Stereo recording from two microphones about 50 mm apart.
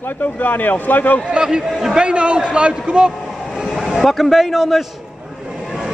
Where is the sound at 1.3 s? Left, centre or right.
Centre.